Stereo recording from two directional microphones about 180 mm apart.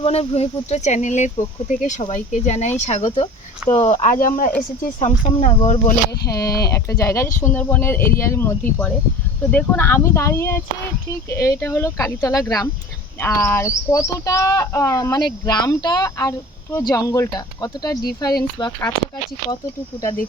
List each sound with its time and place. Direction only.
0.0 s speech: 35° left (ahead or behind)
6.2 s speech: 20° left (ahead or behind)